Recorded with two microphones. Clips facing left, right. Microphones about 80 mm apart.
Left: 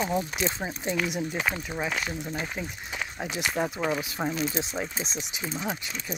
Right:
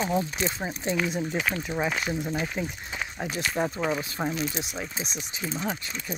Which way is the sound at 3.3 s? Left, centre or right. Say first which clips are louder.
Left 1 dB; centre.